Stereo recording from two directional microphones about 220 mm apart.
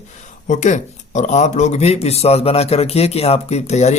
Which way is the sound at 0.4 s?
35° left (ahead or behind).